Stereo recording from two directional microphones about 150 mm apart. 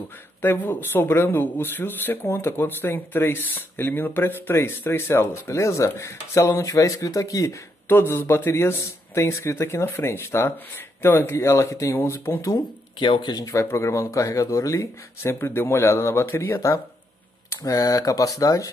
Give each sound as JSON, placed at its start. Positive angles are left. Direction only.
{"t": 0.4, "sound": "speech", "side_deg": 15}
{"t": 13.0, "sound": "speech", "side_deg": 30}